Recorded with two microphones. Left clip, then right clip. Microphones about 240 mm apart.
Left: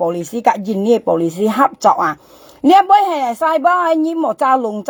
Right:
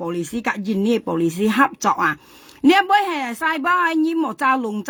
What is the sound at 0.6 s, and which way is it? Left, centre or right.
Speech, centre.